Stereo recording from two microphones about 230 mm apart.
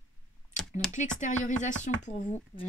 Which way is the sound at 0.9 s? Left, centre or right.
Left.